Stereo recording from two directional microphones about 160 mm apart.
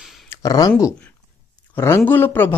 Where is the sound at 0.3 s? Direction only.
20° left (ahead or behind).